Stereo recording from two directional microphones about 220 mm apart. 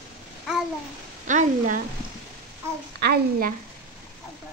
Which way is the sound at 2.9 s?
45° right (ahead or behind).